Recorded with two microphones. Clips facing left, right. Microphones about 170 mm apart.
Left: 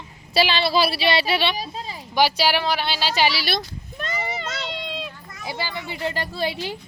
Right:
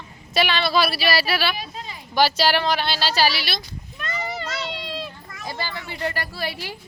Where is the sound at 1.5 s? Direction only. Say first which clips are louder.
Left 3 dB; 35° left (ahead or behind).